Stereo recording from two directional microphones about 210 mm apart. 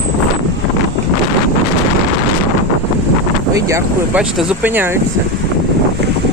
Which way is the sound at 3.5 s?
15° right (ahead or behind).